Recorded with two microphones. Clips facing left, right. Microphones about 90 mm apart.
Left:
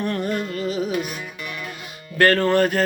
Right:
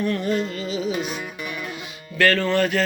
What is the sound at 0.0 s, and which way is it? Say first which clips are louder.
Music: right 1 dB; 55° left (ahead or behind).